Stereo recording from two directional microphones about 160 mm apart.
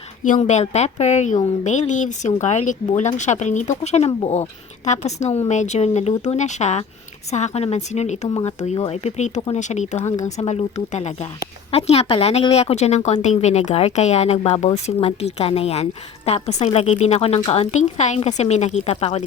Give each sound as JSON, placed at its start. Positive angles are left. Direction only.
{"t": 0.3, "sound": "speech", "side_deg": 50}